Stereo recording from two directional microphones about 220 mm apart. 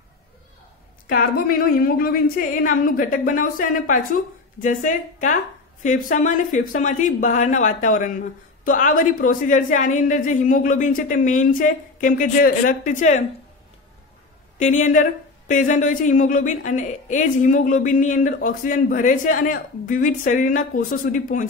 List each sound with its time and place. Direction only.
1.0 s a woman's voice: 40° left (ahead or behind)
14.6 s a woman's voice: 35° left (ahead or behind)